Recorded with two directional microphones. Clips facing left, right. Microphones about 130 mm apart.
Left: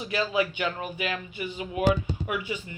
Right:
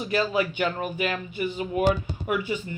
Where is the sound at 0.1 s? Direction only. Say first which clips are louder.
Right 2 dB; 45° right (ahead or behind).